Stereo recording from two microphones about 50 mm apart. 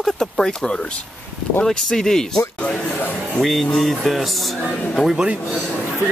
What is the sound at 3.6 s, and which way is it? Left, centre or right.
Speech, centre.